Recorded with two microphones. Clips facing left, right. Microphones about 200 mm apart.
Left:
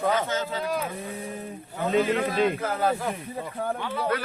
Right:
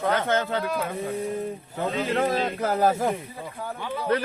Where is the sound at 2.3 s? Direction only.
40° right (ahead or behind).